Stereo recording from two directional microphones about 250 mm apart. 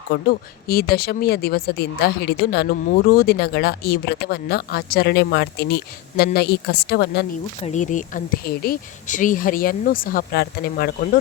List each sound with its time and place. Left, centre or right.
0.3 s speech: left
7.6 s speech: left